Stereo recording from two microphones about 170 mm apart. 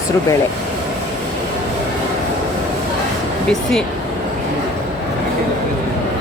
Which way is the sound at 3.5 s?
5° left (ahead or behind).